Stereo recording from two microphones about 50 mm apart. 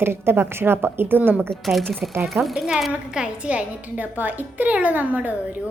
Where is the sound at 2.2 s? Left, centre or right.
Centre.